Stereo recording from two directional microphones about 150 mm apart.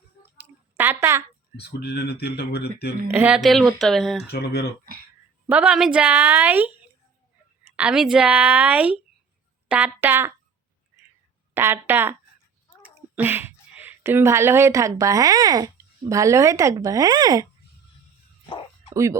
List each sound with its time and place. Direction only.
0.3 s a sound: 15° right (ahead or behind)
1.5 s speech: 90° left
3.1 s speech: 10° right (ahead or behind)
4.3 s speech: 90° left
5.5 s a woman's voice: 5° right (ahead or behind)
11.5 s a woman's voice: 15° right (ahead or behind)